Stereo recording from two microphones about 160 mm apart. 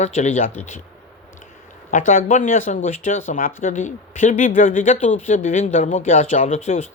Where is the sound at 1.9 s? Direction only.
55° left (ahead or behind).